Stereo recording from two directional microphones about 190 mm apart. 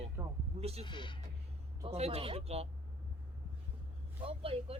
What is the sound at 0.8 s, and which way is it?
Speech, 25° left (ahead or behind).